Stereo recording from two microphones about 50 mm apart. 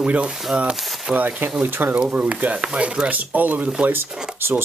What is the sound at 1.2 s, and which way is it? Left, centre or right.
Speech, right.